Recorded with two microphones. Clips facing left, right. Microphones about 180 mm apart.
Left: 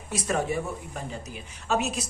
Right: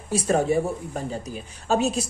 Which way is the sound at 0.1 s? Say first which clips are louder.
Right 6 dB; 35° right (ahead or behind).